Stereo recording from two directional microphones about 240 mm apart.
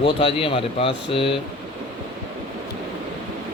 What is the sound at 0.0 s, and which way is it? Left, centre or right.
Speech, left.